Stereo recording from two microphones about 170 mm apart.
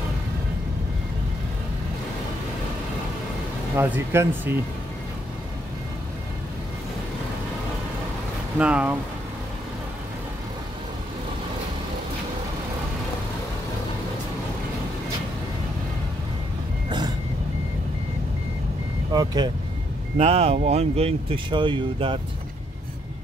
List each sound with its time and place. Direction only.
3.7 s speech: 10° right (ahead or behind)
8.5 s speech: 5° right (ahead or behind)
19.1 s speech: 25° right (ahead or behind)
20.2 s speech: 35° right (ahead or behind)